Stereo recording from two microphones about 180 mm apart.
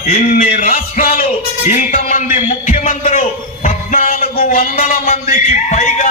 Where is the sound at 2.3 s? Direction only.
40° left (ahead or behind).